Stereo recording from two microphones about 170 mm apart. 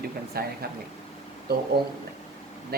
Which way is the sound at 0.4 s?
65° right (ahead or behind).